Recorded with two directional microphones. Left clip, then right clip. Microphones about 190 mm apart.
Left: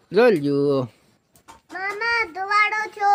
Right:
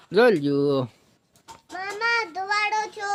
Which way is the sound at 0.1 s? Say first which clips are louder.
Left 2 dB; 5° left (ahead or behind).